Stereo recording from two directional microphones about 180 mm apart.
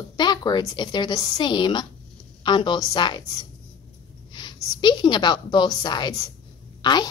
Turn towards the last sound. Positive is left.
turn(degrees=25)  # may be behind; listen again after turning